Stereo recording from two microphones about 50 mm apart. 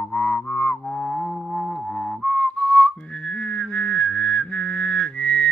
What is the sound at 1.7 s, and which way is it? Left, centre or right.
Whistling, centre.